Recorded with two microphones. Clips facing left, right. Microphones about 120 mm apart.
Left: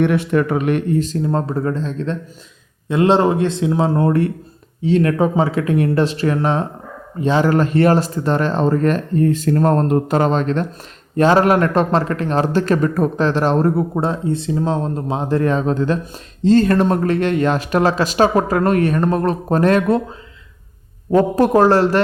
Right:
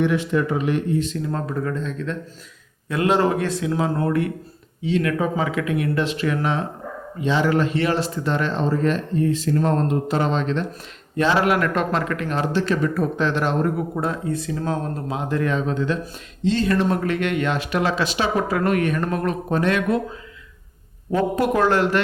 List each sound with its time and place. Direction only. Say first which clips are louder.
0.0 s a man's voice: left 4 dB; 60° left (ahead or behind)
0.9 s speech: left 5 dB; 35° left (ahead or behind)
21.1 s speech: left 6 dB; 35° left (ahead or behind)